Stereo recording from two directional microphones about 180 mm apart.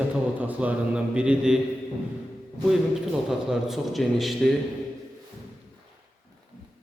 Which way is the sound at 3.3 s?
Centre (ahead or behind).